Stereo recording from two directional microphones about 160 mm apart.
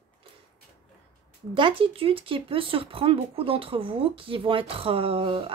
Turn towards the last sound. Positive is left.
turn(degrees=-35)  # may be behind; listen again after turning